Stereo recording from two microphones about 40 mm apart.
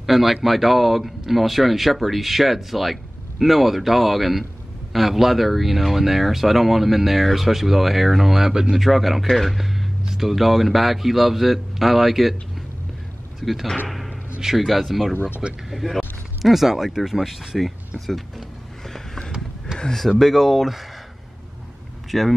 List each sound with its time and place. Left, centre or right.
0.0 s speech: centre
13.4 s speech: centre
13.8 s a sound: centre
14.4 s speech: centre
17.6 s speech: centre
18.9 s a sound: centre
19.7 s a sound: centre
20.2 s speech: centre
22.1 s speech: centre